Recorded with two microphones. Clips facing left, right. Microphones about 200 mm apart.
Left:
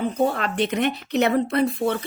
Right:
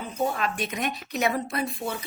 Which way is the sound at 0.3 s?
60° left (ahead or behind).